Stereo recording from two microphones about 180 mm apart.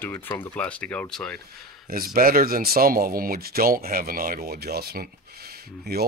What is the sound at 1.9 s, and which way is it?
Speech, 55° right (ahead or behind).